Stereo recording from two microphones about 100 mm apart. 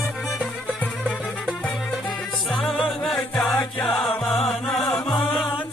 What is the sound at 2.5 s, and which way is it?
Music, centre (ahead or behind).